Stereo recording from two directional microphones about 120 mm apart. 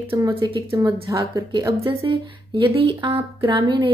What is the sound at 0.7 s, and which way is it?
Speech, 25° right (ahead or behind).